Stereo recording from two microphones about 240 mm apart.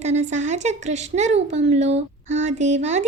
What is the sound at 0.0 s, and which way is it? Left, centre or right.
A woman's voice, right.